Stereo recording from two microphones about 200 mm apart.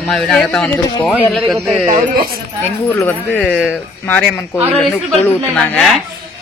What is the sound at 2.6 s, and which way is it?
A child's voice, 10° left (ahead or behind).